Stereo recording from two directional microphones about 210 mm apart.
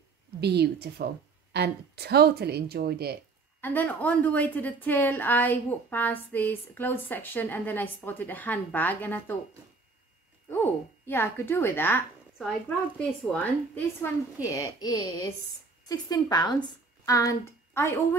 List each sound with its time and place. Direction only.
0.4 s a woman's voice: 50° right (ahead or behind)
3.6 s a woman's voice: 10° left (ahead or behind)
10.5 s a woman's voice: 10° left (ahead or behind)